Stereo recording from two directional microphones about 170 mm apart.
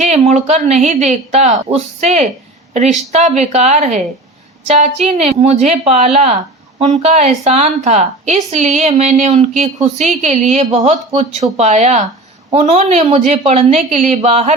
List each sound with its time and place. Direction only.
0.0 s a woman's voice: 40° right (ahead or behind)